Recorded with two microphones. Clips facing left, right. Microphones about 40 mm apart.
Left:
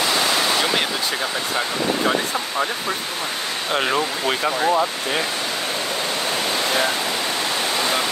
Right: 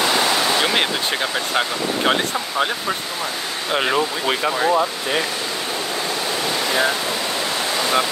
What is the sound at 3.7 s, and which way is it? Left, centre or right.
Speech, centre.